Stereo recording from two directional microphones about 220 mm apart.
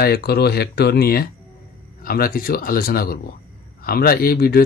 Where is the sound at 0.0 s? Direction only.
45° left (ahead or behind).